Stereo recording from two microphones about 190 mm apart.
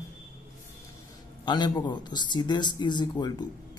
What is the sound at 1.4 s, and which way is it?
A man's voice, 25° left (ahead or behind).